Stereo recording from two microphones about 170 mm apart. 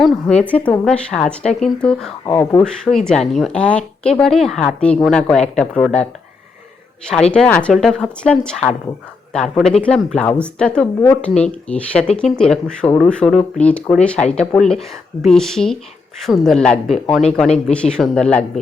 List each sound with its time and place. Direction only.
0.4 s speech: 10° left (ahead or behind)
2.2 s speech: 20° left (ahead or behind)
3.1 s speech: centre (ahead or behind)
7.1 s speech: 5° left (ahead or behind)